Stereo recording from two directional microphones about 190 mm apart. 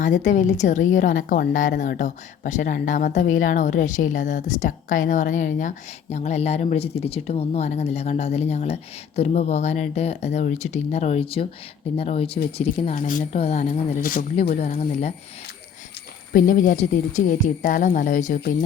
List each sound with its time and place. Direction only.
0.0 s a woman's voice: 45° left (ahead or behind)
16.3 s speech: 45° left (ahead or behind)